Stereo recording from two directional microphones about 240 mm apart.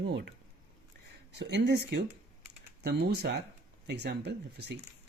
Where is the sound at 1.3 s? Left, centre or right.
Right.